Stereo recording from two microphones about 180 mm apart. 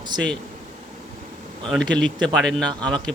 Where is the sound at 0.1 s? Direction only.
25° right (ahead or behind).